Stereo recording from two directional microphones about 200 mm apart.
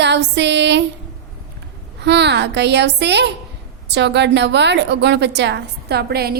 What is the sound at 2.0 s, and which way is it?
A woman's voice, 60° right (ahead or behind).